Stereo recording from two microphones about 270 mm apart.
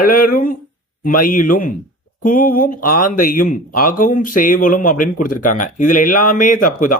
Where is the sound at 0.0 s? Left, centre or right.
Left.